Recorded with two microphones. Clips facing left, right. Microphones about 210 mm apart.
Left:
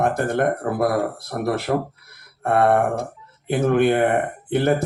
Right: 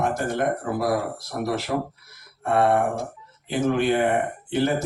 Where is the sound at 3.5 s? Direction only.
55° left (ahead or behind).